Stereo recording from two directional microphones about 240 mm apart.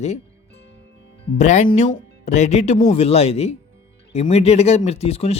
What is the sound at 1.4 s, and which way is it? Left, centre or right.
Speech, left.